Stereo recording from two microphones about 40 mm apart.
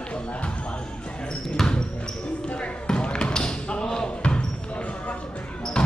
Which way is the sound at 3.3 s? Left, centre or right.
Left.